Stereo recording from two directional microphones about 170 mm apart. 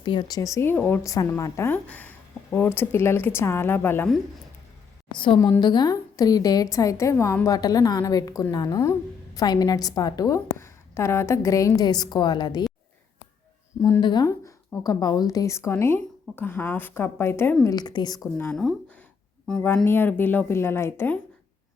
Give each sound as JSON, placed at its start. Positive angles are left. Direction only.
{"t": 0.0, "sound": "speech", "side_deg": 25}
{"t": 5.1, "sound": "a woman's voice", "side_deg": 30}
{"t": 13.8, "sound": "speech", "side_deg": 25}
{"t": 18.3, "sound": "speech", "side_deg": 5}